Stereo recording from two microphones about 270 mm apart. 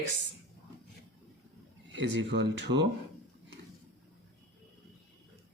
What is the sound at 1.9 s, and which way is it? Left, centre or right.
Speech, right.